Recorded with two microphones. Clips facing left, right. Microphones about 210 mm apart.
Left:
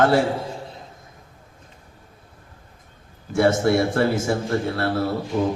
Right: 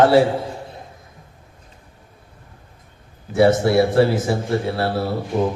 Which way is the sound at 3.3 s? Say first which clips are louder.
Right 3 dB; 50° left (ahead or behind).